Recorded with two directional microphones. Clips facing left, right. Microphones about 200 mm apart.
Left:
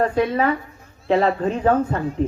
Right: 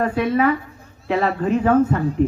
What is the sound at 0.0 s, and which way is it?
Speech, 30° left (ahead or behind).